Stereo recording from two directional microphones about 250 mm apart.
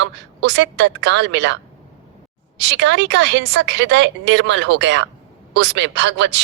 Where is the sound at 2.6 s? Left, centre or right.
Right.